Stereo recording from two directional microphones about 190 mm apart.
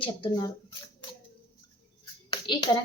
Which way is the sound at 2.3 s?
25° left (ahead or behind).